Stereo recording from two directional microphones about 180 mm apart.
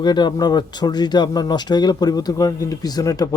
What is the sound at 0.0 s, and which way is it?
Speech, 25° left (ahead or behind).